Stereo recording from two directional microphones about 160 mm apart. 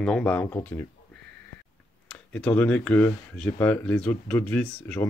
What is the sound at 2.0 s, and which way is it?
Speech, 5° left (ahead or behind).